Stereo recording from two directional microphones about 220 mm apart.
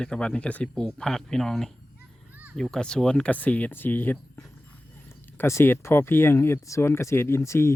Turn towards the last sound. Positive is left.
turn(degrees=10)  # may be behind; listen again after turning